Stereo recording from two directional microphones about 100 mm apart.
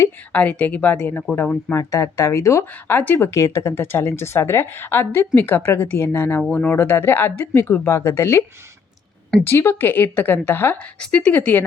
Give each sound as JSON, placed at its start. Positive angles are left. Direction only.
{"t": 0.3, "sound": "speech", "side_deg": 15}
{"t": 1.7, "sound": "speech", "side_deg": 30}
{"t": 3.2, "sound": "speech", "side_deg": 30}
{"t": 6.5, "sound": "speech", "side_deg": 15}
{"t": 11.0, "sound": "speech", "side_deg": 10}